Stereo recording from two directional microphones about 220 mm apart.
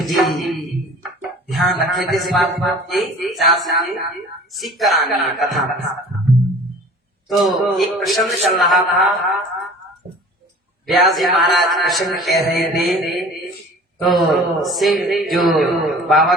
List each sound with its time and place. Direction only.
0.0 s music: centre (ahead or behind)
1.5 s a man's voice: centre (ahead or behind)
6.3 s music: centre (ahead or behind)
7.3 s a man's voice: centre (ahead or behind)
10.8 s a man's voice: centre (ahead or behind)